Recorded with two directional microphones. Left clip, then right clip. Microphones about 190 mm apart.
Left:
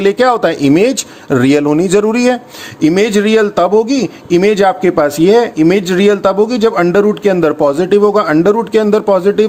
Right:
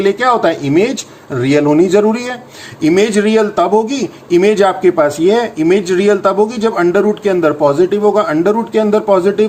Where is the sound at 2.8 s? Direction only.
35° left (ahead or behind).